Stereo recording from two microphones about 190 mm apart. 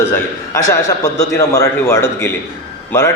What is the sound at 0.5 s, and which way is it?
A man's voice, 15° left (ahead or behind).